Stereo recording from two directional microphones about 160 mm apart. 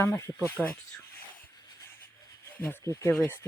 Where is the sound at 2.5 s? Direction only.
10° left (ahead or behind).